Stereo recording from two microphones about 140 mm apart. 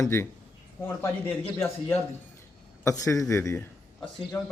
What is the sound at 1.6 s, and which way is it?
A man's voice, 15° left (ahead or behind).